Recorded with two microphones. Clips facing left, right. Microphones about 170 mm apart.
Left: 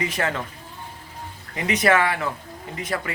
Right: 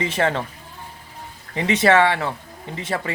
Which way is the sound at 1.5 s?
25° right (ahead or behind).